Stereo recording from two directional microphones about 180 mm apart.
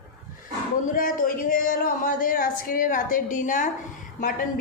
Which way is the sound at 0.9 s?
50° left (ahead or behind).